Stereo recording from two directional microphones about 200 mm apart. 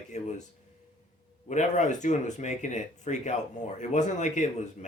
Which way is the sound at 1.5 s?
35° left (ahead or behind).